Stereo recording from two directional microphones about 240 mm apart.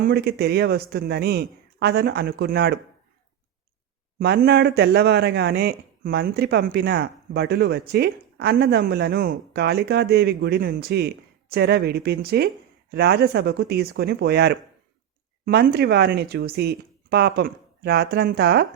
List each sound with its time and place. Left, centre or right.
0.0 s speech: right
4.2 s speech: right